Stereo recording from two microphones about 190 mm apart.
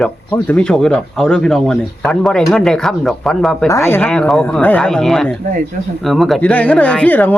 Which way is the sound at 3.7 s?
15° left (ahead or behind).